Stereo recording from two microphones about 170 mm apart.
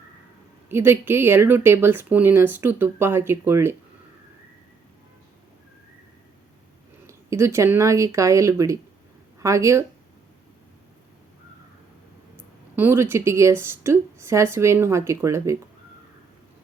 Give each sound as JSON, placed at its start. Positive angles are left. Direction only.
{"t": 0.7, "sound": "speech", "side_deg": -15}
{"t": 7.1, "sound": "speech", "side_deg": -15}
{"t": 12.7, "sound": "speech", "side_deg": -10}